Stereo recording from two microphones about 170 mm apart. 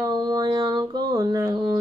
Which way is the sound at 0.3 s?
25° right (ahead or behind).